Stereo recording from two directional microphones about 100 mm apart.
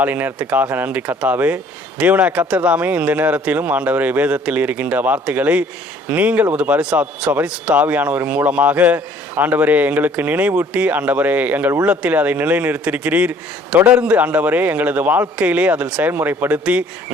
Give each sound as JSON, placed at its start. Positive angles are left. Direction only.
{"t": 0.0, "sound": "speech", "side_deg": -15}